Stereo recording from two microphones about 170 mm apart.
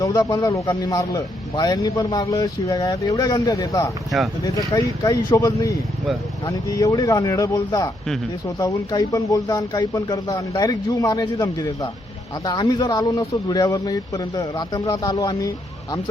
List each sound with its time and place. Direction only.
0.0 s a man's voice: 25° left (ahead or behind)